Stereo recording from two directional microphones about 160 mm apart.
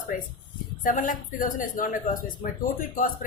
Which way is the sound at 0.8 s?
55° left (ahead or behind).